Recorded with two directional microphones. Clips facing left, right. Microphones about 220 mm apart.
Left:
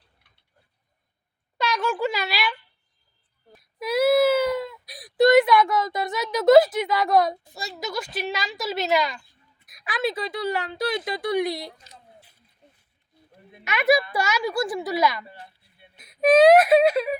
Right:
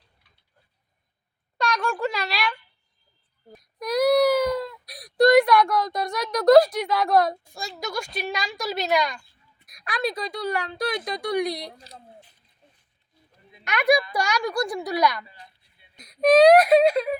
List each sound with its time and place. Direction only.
1.5 s a sound: 5° left (ahead or behind)
3.6 s whimper: 5° left (ahead or behind)
7.5 s speech: 5° left (ahead or behind)
13.7 s speech: 5° left (ahead or behind)
15.3 s a sound: 60° left (ahead or behind)
16.0 s speech: 5° left (ahead or behind)